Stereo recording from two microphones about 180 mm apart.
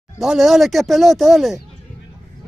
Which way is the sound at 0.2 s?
Centre (ahead or behind).